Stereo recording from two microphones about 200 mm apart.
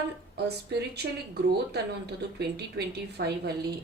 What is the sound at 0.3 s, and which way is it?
Speech, 55° right (ahead or behind).